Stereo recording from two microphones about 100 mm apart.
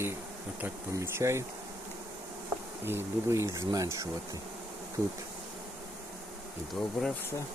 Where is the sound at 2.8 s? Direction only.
25° right (ahead or behind).